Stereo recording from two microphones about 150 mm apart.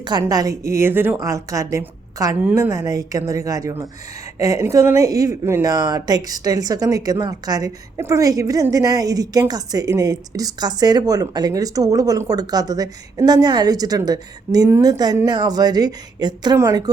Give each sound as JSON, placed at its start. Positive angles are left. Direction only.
{"t": 0.0, "sound": "a woman's voice", "side_deg": -25}